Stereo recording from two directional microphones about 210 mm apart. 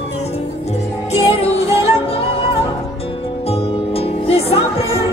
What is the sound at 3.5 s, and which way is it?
Music, 30° left (ahead or behind).